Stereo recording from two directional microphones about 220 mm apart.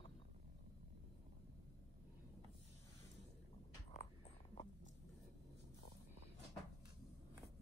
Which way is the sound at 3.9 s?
30° left (ahead or behind).